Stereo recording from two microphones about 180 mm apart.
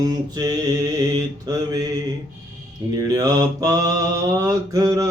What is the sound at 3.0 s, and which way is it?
Mantra, 20° right (ahead or behind).